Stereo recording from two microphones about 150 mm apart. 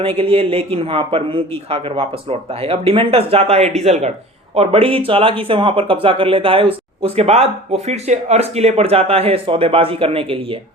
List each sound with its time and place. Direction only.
0.0 s speech: 40° right (ahead or behind)